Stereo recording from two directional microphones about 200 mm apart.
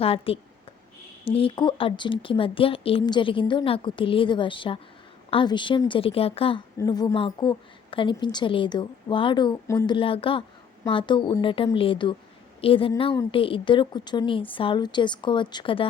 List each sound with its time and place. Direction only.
0.0 s a woman's voice: 30° left (ahead or behind)